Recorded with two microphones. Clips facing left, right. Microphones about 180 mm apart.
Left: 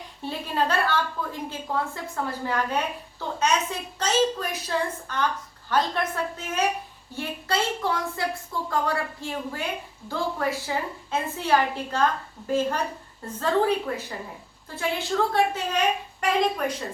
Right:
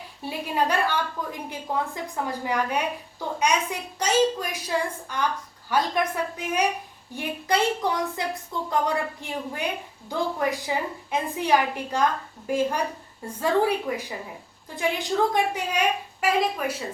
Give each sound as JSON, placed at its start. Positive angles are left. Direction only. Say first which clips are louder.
{"t": 0.2, "sound": "a woman's voice", "louder": "right 1 dB", "side_deg": -10}